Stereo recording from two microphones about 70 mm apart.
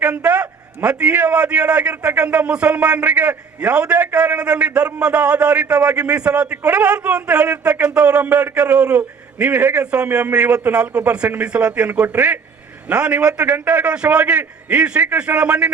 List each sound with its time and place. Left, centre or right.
0.0 s a man's voice: centre
9.8 s a man's voice: centre